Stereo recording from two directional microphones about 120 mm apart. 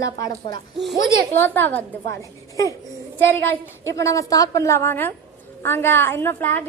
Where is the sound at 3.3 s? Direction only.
20° left (ahead or behind).